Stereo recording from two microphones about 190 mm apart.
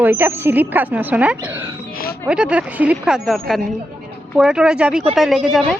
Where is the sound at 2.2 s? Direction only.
5° right (ahead or behind).